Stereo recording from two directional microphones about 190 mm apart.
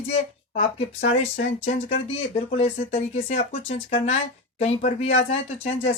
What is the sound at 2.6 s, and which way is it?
Speech, 30° left (ahead or behind).